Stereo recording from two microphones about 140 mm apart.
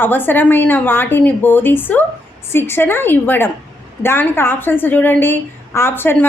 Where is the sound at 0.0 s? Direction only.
15° left (ahead or behind).